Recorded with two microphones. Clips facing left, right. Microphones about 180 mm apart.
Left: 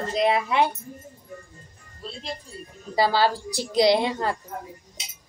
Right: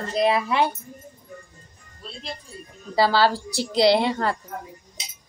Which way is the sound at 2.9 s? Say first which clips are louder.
Right 2 dB; 15° left (ahead or behind).